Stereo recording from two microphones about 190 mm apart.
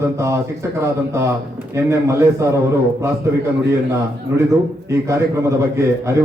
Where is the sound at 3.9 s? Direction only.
15° right (ahead or behind).